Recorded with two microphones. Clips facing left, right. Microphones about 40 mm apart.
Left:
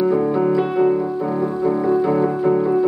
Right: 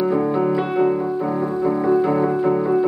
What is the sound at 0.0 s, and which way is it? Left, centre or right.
Music, centre.